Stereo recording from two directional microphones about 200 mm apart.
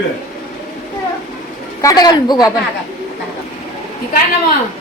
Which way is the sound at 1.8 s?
20° left (ahead or behind).